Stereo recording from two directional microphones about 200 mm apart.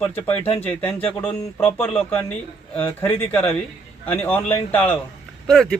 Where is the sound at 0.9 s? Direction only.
30° left (ahead or behind).